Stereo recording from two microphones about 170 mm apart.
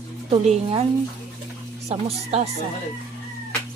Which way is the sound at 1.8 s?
40° right (ahead or behind).